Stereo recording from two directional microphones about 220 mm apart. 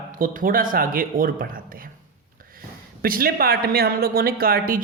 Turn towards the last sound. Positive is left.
turn(degrees=-40)  # may be behind; listen again after turning